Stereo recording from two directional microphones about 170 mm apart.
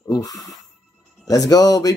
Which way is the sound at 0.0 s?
20° left (ahead or behind).